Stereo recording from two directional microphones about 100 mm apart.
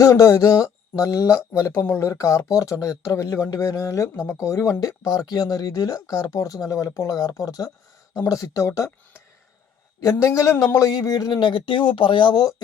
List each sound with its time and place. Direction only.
0.0 s speech: 35° left (ahead or behind)